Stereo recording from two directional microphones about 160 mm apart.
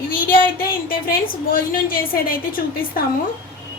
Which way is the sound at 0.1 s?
65° left (ahead or behind).